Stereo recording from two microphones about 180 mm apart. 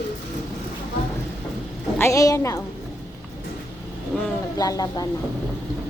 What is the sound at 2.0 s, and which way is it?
Speech, 15° left (ahead or behind).